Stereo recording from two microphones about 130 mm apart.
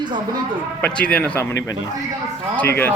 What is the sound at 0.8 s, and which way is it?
Speech, 10° left (ahead or behind).